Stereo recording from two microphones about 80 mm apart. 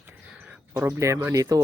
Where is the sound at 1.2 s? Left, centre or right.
Right.